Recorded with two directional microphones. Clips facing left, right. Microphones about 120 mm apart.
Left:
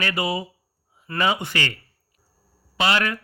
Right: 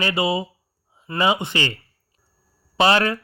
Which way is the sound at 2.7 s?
30° right (ahead or behind).